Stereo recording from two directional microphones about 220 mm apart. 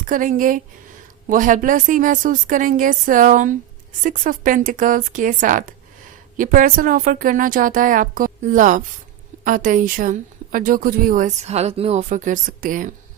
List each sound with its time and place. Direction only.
0.0 s a woman's voice: 40° right (ahead or behind)